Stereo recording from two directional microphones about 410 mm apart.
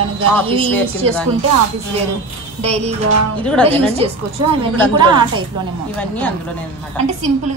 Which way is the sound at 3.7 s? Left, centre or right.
Centre.